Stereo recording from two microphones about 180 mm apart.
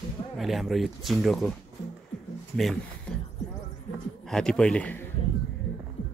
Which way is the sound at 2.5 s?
Centre (ahead or behind).